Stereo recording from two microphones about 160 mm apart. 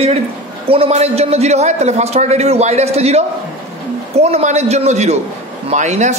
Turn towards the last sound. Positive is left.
turn(degrees=-50)  # may be behind; listen again after turning